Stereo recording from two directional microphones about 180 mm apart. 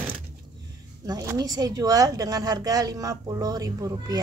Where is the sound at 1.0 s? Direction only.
20° right (ahead or behind).